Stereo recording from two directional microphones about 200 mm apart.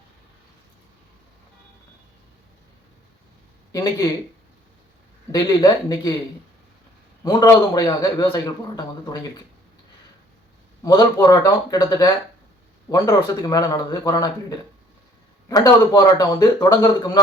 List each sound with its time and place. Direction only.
3.7 s speech: 15° left (ahead or behind)
5.3 s a man's voice: 20° left (ahead or behind)
7.3 s a man's voice: 20° left (ahead or behind)
10.8 s a man's voice: 15° left (ahead or behind)
15.4 s a man's voice: 20° left (ahead or behind)